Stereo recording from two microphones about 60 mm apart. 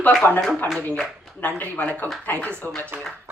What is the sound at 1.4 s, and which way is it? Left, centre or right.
A woman's voice, left.